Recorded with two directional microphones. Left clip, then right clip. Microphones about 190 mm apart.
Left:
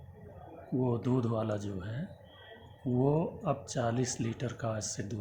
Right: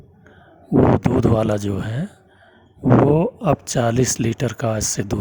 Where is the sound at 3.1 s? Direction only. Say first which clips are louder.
Right 14 dB; 55° right (ahead or behind).